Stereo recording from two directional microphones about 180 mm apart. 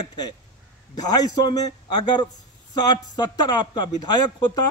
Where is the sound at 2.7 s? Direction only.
20° left (ahead or behind).